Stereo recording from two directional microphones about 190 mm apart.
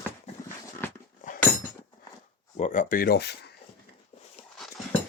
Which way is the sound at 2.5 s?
40° left (ahead or behind).